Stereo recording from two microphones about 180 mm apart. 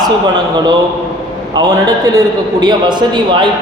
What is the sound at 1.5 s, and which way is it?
A man's voice, 20° right (ahead or behind).